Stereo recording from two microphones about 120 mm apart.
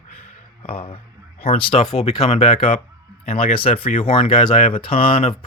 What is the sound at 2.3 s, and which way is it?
Speech, 60° left (ahead or behind).